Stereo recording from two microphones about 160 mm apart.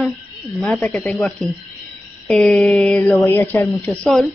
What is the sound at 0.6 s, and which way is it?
Speech, 5° left (ahead or behind).